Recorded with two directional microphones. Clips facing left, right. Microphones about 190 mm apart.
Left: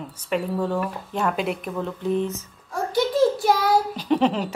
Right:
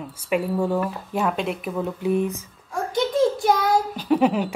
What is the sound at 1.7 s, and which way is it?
Speech, 10° right (ahead or behind).